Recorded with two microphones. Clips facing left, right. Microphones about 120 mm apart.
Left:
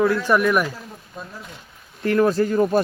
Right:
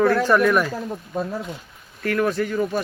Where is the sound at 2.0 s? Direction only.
30° left (ahead or behind).